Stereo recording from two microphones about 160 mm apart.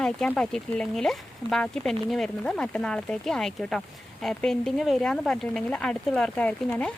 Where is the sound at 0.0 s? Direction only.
5° left (ahead or behind).